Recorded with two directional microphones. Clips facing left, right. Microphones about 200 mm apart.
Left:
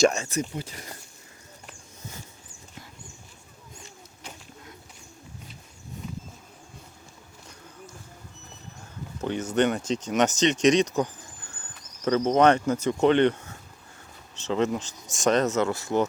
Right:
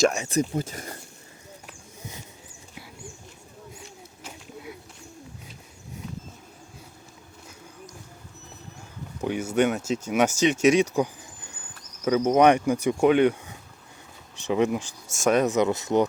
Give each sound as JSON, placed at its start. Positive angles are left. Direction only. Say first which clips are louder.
{"t": 0.3, "sound": "speech", "louder": "right 5 dB", "side_deg": -40}
{"t": 4.2, "sound": "a sound", "louder": "right 4 dB", "side_deg": -5}
{"t": 9.2, "sound": "speech", "louder": "right 1 dB", "side_deg": -10}